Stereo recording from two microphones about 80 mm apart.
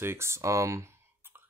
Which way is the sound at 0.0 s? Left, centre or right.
Right.